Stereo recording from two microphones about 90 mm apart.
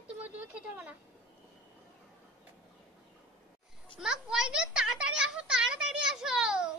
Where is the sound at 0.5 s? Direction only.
15° right (ahead or behind).